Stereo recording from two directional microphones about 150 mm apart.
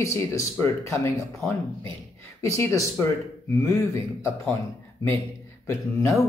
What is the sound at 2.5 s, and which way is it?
Speech, 20° left (ahead or behind).